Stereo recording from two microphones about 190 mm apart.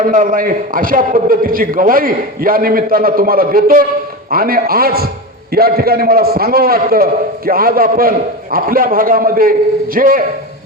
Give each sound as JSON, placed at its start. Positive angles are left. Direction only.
{"t": 0.1, "sound": "a man's voice", "side_deg": -45}